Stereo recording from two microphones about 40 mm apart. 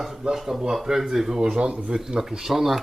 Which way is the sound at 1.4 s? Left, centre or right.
Right.